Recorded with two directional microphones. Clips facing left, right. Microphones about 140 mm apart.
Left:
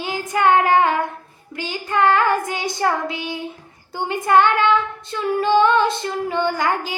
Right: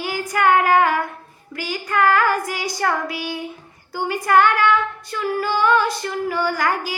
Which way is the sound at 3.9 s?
25° left (ahead or behind).